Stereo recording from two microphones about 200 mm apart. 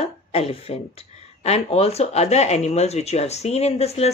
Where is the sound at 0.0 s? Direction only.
30° left (ahead or behind).